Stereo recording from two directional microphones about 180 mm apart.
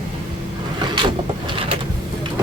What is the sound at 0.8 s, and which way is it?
Vehicle, 25° right (ahead or behind).